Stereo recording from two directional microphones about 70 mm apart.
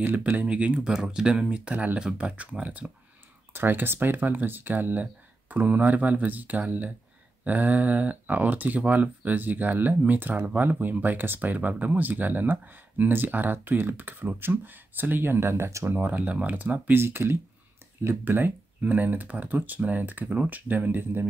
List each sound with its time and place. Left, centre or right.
0.0 s speech: right
3.5 s speech: right
16.0 s speech: right